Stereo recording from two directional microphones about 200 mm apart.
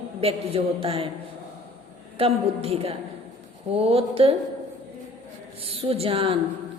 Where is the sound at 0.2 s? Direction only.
30° right (ahead or behind).